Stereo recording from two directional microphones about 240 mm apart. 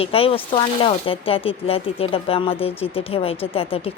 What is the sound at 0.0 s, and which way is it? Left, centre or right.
Speech, left.